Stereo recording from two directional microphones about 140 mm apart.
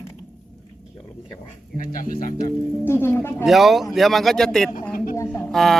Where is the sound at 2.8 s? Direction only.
15° left (ahead or behind).